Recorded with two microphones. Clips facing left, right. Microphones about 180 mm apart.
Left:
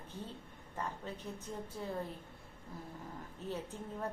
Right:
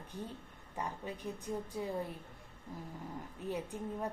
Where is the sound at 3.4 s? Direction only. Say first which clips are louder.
Right 2 dB; 15° right (ahead or behind).